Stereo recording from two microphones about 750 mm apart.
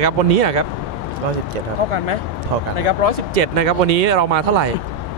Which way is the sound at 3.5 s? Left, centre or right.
Right.